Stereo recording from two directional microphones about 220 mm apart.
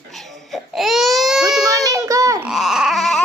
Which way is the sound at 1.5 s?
Centre (ahead or behind).